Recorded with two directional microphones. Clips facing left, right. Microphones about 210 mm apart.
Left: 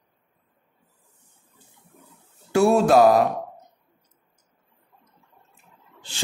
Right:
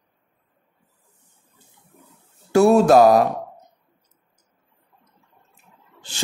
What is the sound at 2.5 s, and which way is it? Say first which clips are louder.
Speech: right 4 dB; 40° right (ahead or behind).